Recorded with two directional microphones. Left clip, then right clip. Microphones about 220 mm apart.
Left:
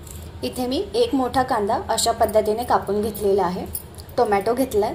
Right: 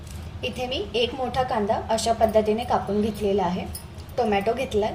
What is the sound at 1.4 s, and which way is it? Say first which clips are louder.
A woman's voice: left 2 dB; 30° left (ahead or behind).